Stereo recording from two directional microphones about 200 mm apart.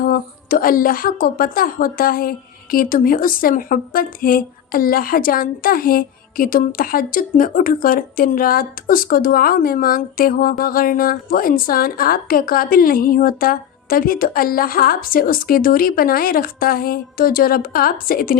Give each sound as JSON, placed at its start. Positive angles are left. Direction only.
{"t": 0.0, "sound": "a woman's voice", "side_deg": 45}